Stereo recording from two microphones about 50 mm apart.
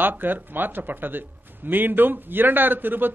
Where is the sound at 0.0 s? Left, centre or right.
Right.